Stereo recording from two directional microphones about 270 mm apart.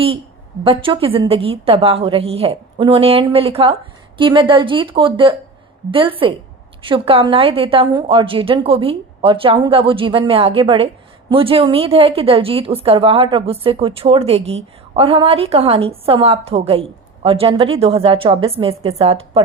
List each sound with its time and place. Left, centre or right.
0.6 s a woman's voice: centre